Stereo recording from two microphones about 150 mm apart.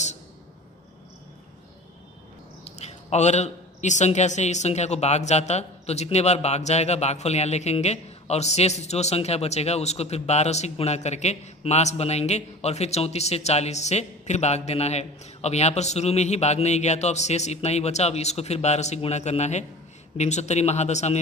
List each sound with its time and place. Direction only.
2.6 s a man's voice: 45° left (ahead or behind)